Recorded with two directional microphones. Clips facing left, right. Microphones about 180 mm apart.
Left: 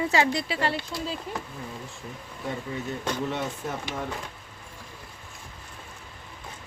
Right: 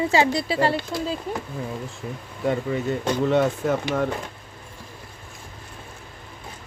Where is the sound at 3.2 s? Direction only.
90° right.